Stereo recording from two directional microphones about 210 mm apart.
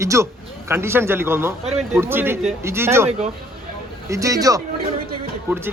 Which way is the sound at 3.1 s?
30° right (ahead or behind).